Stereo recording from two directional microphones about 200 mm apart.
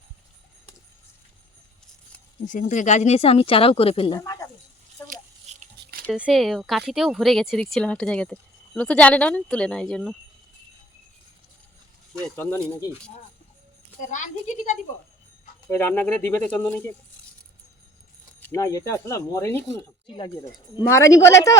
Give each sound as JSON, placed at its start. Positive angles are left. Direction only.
{"t": 2.5, "sound": "speech", "side_deg": 40}
{"t": 5.0, "sound": "toothbrush", "side_deg": -40}
{"t": 5.8, "sound": "a sound", "side_deg": -50}
{"t": 6.1, "sound": "speech", "side_deg": -5}
{"t": 12.2, "sound": "speech", "side_deg": 5}
{"t": 14.0, "sound": "speech", "side_deg": 40}
{"t": 15.7, "sound": "speech", "side_deg": 10}
{"t": 18.3, "sound": "speech", "side_deg": 10}
{"t": 20.1, "sound": "speech", "side_deg": 25}